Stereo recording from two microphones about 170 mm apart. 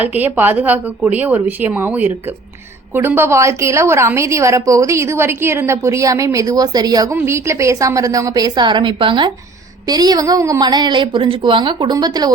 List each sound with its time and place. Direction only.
0.0 s a woman's voice: 10° right (ahead or behind)